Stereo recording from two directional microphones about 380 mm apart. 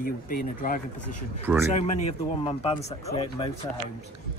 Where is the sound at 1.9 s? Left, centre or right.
Centre.